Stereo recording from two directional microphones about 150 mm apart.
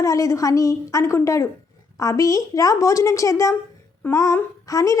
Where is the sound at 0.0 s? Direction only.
20° left (ahead or behind).